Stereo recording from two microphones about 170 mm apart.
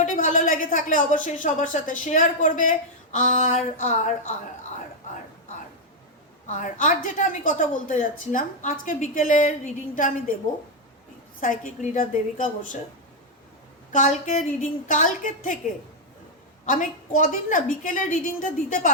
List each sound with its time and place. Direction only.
0.0 s speech: 50° left (ahead or behind)
6.5 s speech: 45° left (ahead or behind)
11.3 s speech: 50° left (ahead or behind)
13.9 s speech: 50° left (ahead or behind)
16.6 s speech: 50° left (ahead or behind)